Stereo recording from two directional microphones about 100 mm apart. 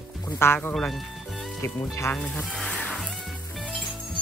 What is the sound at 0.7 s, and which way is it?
Music, 5° left (ahead or behind).